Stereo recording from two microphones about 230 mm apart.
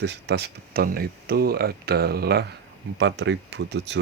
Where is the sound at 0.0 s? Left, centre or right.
Right.